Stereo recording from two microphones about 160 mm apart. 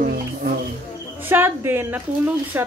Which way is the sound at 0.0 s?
65° right (ahead or behind).